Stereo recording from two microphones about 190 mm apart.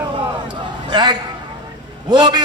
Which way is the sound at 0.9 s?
25° right (ahead or behind).